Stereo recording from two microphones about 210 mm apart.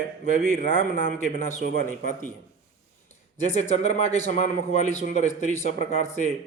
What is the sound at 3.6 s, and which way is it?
A man's voice, 30° left (ahead or behind).